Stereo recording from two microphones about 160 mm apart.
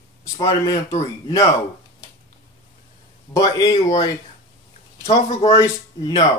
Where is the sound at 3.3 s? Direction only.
20° left (ahead or behind).